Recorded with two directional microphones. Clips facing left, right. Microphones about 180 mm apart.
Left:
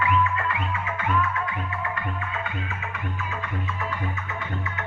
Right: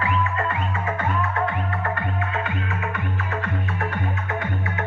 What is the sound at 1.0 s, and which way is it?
Music, 55° right (ahead or behind).